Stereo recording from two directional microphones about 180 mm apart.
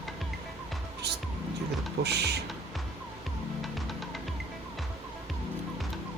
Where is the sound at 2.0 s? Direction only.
70° right (ahead or behind).